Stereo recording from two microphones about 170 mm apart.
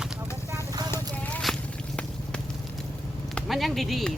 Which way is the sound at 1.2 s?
5° left (ahead or behind).